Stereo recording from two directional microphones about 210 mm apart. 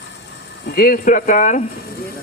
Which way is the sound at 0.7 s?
45° left (ahead or behind).